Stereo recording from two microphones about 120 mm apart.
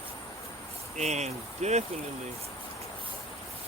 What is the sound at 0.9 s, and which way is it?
Speech, 70° right (ahead or behind).